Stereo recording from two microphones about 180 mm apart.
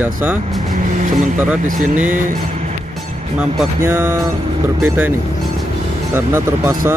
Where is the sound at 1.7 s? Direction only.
45° right (ahead or behind).